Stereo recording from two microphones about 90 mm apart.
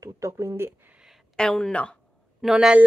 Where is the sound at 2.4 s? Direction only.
5° right (ahead or behind).